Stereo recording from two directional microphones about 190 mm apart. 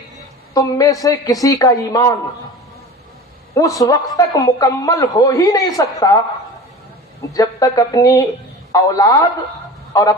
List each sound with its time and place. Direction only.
0.5 s a man's voice: 20° left (ahead or behind)
3.5 s a man's voice: 15° left (ahead or behind)
7.3 s a man's voice: 20° left (ahead or behind)